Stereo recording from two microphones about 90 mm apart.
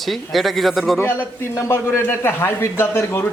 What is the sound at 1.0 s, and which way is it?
A man's voice, 25° left (ahead or behind).